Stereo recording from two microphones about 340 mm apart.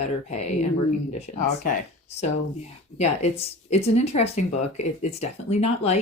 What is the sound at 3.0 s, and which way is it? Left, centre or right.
Speech, centre.